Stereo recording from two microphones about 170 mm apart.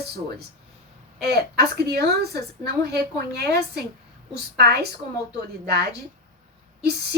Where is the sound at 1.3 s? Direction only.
70° right (ahead or behind).